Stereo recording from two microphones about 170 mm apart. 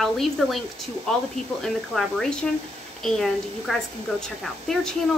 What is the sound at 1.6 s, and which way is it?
Speech, centre (ahead or behind).